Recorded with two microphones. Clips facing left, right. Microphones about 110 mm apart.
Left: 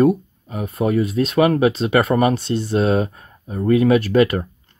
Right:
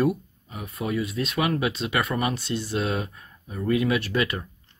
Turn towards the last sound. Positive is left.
turn(degrees=50)  # may be behind; listen again after turning